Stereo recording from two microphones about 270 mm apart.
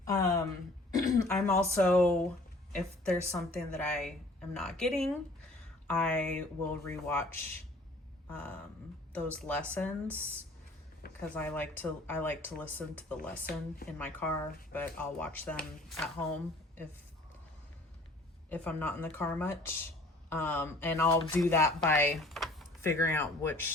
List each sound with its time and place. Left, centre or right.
0.0 s a sound: centre
0.9 s throat clearing: centre
1.4 s speech: centre
9.1 s speech: centre
11.0 s a sound: left
11.3 s speech: centre
14.7 s speech: centre
18.4 s speech: centre